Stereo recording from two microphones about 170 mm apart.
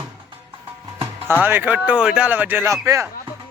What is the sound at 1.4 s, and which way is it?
Speech, 10° right (ahead or behind).